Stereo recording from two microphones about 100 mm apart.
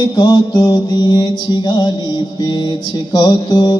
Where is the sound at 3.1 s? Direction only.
45° left (ahead or behind).